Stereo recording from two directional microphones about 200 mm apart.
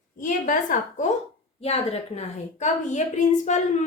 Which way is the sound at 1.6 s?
30° left (ahead or behind).